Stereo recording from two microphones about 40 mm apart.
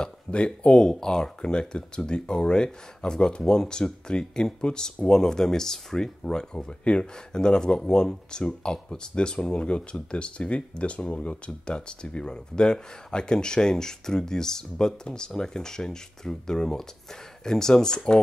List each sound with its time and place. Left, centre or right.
0.0 s speech: left